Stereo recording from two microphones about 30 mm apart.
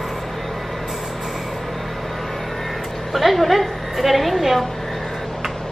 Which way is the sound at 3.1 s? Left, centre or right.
Centre.